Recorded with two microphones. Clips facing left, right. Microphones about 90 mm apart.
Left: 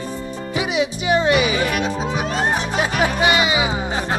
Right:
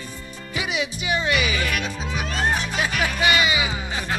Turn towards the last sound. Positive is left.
turn(degrees=30)  # may be behind; listen again after turning